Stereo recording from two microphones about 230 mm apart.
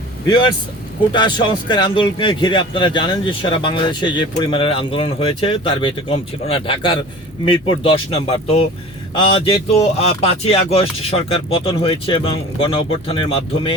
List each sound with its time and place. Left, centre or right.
0.3 s a man's voice: centre